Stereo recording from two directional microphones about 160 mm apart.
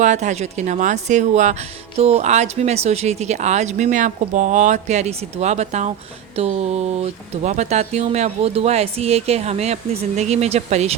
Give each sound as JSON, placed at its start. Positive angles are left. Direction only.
{"t": 0.0, "sound": "speech", "side_deg": -45}